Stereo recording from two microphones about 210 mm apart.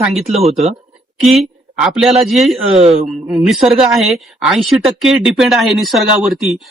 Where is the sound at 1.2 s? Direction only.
Centre (ahead or behind).